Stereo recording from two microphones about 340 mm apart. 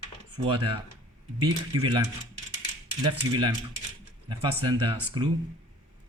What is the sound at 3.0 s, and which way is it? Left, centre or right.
Speech, centre.